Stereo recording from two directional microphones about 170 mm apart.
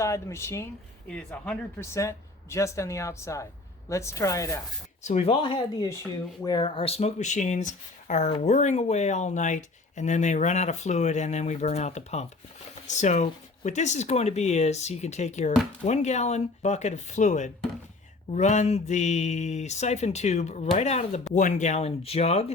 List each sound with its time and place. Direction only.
0.0 s speech: 15° left (ahead or behind)
5.0 s speech: 40° left (ahead or behind)